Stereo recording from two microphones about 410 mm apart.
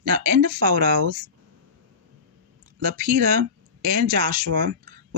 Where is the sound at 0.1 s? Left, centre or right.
Right.